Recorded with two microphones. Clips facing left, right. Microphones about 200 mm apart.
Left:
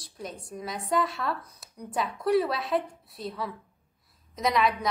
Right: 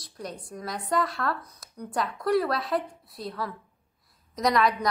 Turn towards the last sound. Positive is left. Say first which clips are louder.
# right 2 dB
turn(degrees=5)  # may be behind; listen again after turning